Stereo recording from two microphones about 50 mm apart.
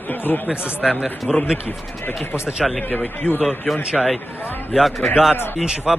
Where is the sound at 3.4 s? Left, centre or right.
Centre.